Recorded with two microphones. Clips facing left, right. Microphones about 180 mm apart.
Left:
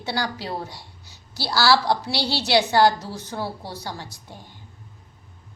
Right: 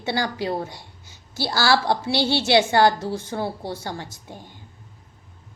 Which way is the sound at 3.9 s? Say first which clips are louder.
Right 3 dB; 15° right (ahead or behind).